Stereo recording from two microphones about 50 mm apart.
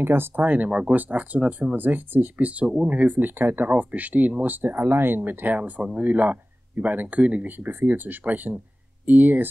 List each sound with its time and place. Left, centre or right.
0.0 s speech: right
0.4 s speech: right
0.7 s speech: right
0.9 s speech: right
1.8 s speech: right
3.7 s speech: right
7.5 s speech: right